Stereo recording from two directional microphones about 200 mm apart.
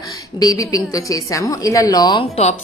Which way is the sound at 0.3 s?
20° left (ahead or behind).